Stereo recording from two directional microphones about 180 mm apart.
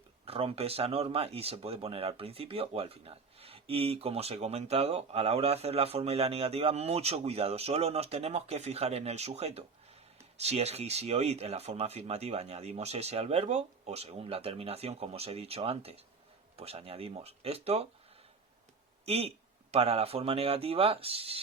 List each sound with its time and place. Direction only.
0.3 s speech: 35° right (ahead or behind)
19.0 s speech: 35° right (ahead or behind)